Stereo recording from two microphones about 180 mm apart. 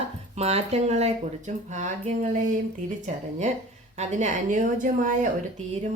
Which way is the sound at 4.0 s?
40° right (ahead or behind).